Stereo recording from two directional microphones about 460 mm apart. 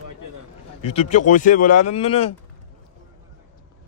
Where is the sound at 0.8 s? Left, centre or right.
Centre.